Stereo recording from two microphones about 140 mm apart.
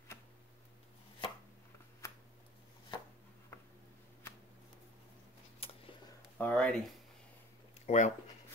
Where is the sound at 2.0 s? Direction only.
20° left (ahead or behind).